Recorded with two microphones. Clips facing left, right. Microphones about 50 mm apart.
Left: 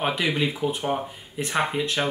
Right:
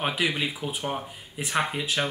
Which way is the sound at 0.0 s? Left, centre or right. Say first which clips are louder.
Left 3 dB; centre.